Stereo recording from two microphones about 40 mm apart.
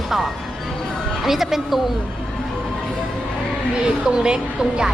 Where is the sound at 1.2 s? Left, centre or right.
Centre.